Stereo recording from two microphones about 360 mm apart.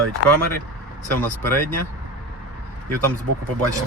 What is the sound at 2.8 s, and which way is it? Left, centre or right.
Speech, right.